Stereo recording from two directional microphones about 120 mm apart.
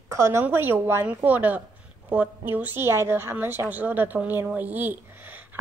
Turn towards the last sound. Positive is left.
turn(degrees=-15)  # may be behind; listen again after turning